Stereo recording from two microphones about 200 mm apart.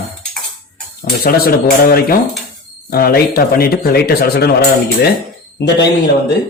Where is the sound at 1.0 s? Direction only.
50° left (ahead or behind).